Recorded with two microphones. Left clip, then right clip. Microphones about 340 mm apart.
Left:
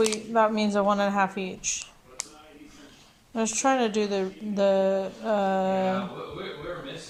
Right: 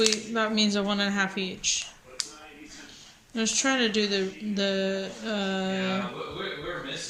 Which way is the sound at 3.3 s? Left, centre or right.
Centre.